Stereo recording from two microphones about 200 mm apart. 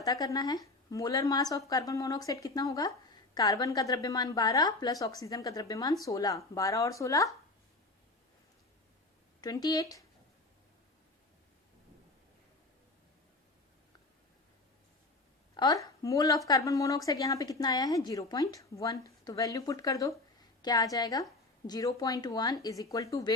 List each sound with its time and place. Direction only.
0.0 s speech: 15° left (ahead or behind)
9.4 s speech: 20° left (ahead or behind)
15.5 s a woman's voice: 20° left (ahead or behind)